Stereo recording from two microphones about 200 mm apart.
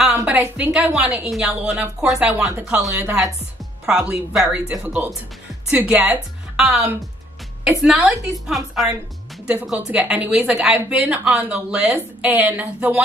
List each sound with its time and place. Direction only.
0.2 s a woman's voice: 5° right (ahead or behind)